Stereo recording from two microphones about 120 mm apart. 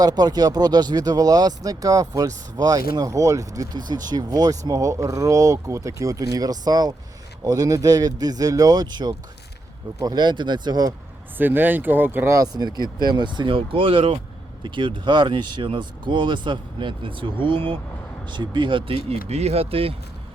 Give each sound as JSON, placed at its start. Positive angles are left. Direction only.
{"t": 0.0, "sound": "speech", "side_deg": -35}
{"t": 11.3, "sound": "speech", "side_deg": -15}